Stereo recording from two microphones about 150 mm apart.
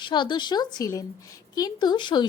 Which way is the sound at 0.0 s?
30° left (ahead or behind).